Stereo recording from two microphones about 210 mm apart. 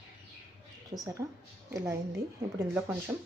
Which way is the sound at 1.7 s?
15° right (ahead or behind).